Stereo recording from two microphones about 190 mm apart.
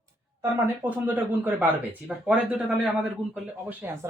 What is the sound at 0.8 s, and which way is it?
Speech, 10° right (ahead or behind).